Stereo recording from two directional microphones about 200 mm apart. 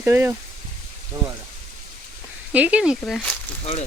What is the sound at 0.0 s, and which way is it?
Speech, 10° right (ahead or behind).